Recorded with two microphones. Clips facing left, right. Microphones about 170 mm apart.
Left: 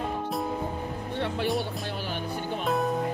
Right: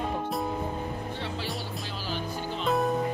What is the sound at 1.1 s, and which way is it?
Music, 60° left (ahead or behind).